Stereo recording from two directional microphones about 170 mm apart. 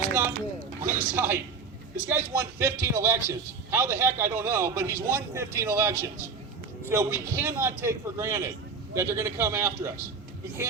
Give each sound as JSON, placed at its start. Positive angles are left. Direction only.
{"t": 0.1, "sound": "a man's voice", "side_deg": -15}